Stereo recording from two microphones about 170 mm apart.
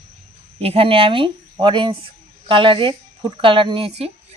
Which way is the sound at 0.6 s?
35° right (ahead or behind).